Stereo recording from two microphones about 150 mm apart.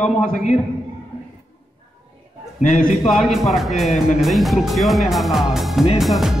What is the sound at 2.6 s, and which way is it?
Speech, 60° left (ahead or behind).